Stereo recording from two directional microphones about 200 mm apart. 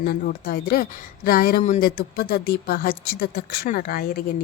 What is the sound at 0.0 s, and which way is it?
Speech, 50° left (ahead or behind).